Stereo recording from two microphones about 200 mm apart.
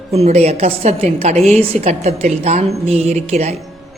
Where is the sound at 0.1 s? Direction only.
30° right (ahead or behind).